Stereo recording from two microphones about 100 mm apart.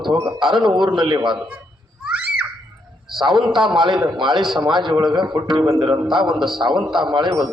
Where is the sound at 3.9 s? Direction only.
5° right (ahead or behind).